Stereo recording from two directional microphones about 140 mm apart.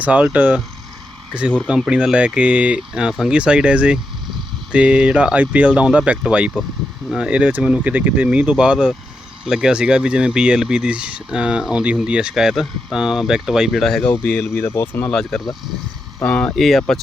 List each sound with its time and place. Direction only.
0.0 s speech: 10° right (ahead or behind)
14.1 s speech: 15° left (ahead or behind)
15.1 s speech: 5° left (ahead or behind)